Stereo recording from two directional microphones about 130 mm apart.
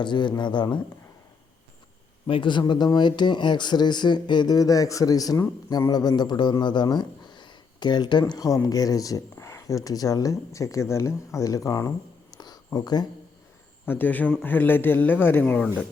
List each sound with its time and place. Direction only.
0.0 s speech: 35° left (ahead or behind)
2.2 s speech: 40° left (ahead or behind)
13.8 s a man's voice: 15° left (ahead or behind)